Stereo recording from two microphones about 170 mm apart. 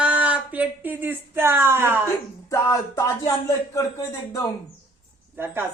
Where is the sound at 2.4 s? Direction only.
20° left (ahead or behind).